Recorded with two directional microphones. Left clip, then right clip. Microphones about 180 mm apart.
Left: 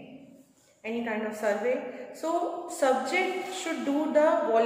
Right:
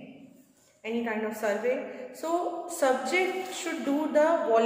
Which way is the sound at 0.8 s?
20° right (ahead or behind).